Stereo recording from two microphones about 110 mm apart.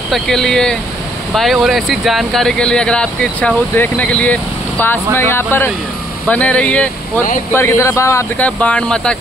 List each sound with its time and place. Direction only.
0.1 s speech: 5° left (ahead or behind)
7.5 s speech: 25° left (ahead or behind)
8.4 s speech: 10° left (ahead or behind)